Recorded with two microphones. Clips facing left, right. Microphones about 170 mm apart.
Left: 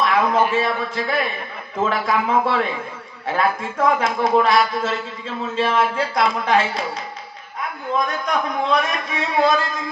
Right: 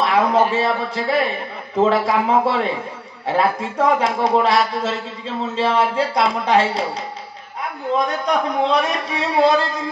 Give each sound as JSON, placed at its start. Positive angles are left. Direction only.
{"t": 0.0, "sound": "a man's voice", "side_deg": -35}
{"t": 8.0, "sound": "a man's voice", "side_deg": -35}